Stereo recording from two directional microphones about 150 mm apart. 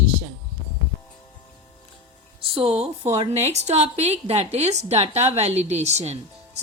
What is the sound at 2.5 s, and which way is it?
A woman's voice, 40° right (ahead or behind).